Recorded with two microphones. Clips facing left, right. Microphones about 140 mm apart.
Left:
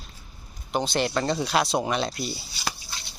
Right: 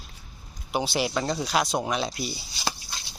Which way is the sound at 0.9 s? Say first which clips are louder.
Left 3 dB; 5° right (ahead or behind).